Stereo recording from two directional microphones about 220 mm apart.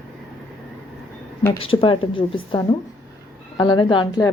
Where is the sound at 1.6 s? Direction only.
25° left (ahead or behind).